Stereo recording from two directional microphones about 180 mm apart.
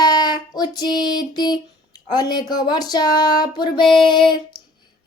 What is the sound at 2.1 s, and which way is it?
Speech, 25° left (ahead or behind).